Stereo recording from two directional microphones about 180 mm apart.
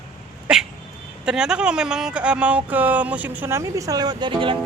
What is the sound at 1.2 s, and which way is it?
Mantra, 5° right (ahead or behind).